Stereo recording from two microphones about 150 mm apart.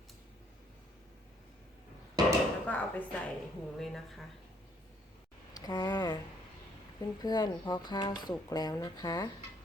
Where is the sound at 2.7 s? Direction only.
10° left (ahead or behind).